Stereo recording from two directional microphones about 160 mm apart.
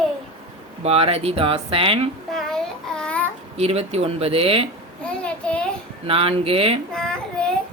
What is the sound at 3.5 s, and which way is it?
Speech, 40° right (ahead or behind).